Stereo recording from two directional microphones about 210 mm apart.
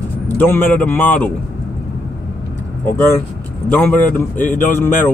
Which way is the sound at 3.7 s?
10° left (ahead or behind).